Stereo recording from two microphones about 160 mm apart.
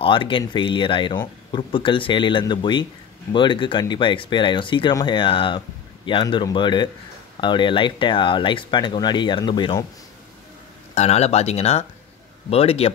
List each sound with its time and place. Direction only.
0.0 s speech: 30° left (ahead or behind)
11.0 s speech: 40° left (ahead or behind)